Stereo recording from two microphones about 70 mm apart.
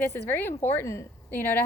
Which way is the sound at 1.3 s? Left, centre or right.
Left.